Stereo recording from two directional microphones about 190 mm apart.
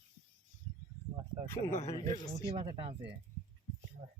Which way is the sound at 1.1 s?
25° right (ahead or behind).